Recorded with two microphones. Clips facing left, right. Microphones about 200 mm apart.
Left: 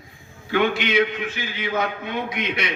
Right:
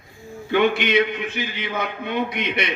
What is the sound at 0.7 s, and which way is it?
A man's voice, 55° right (ahead or behind).